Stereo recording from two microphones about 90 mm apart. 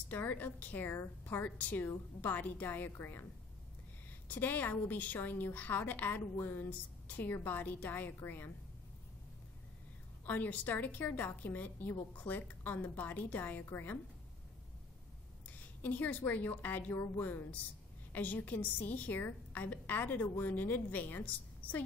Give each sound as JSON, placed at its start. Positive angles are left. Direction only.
{"t": 0.1, "sound": "a woman's voice", "side_deg": 20}
{"t": 4.3, "sound": "a woman's voice", "side_deg": 20}
{"t": 10.2, "sound": "a woman's voice", "side_deg": 20}
{"t": 15.8, "sound": "a woman's voice", "side_deg": 20}